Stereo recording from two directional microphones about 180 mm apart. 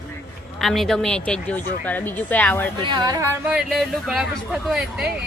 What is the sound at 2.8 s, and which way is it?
Speech, 25° right (ahead or behind).